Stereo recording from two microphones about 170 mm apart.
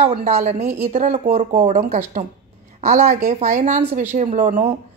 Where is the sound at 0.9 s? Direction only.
40° right (ahead or behind).